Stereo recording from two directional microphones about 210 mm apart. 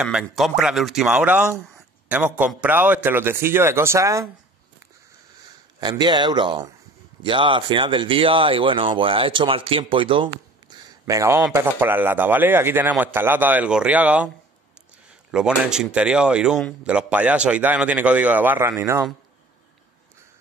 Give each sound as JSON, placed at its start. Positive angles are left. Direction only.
{"t": 0.0, "sound": "speech", "side_deg": -5}
{"t": 5.4, "sound": "speech", "side_deg": -20}
{"t": 11.1, "sound": "speech", "side_deg": -15}
{"t": 15.3, "sound": "speech", "side_deg": -5}